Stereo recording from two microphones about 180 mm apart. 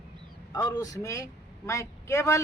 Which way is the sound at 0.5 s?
20° left (ahead or behind).